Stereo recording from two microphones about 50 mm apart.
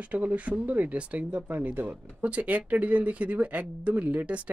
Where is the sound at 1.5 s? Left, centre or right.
Right.